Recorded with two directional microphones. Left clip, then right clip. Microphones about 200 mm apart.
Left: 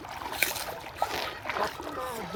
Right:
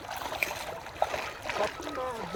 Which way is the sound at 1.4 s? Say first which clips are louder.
Right 1 dB; 10° right (ahead or behind).